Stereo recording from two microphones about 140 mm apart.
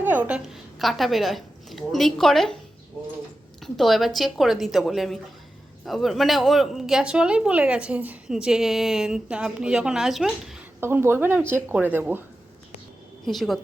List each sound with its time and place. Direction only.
0.0 s a woman's voice: 15° right (ahead or behind)
3.6 s a woman's voice: centre (ahead or behind)
10.8 s speech: 15° right (ahead or behind)
13.2 s a woman's voice: centre (ahead or behind)